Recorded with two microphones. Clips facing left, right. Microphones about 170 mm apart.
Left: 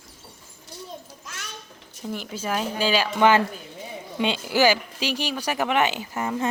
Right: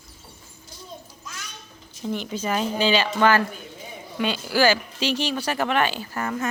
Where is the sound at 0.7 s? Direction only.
70° left (ahead or behind).